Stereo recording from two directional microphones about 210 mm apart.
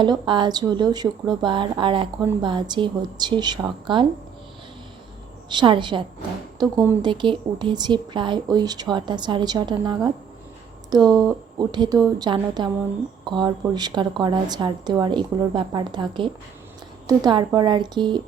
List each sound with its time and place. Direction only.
0.0 s a woman's voice: 20° right (ahead or behind)
5.5 s a woman's voice: 20° right (ahead or behind)
11.1 s a woman's voice: 20° right (ahead or behind)